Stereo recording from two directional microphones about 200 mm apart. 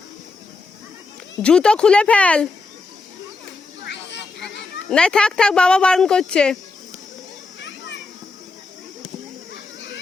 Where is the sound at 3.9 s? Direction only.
60° left (ahead or behind).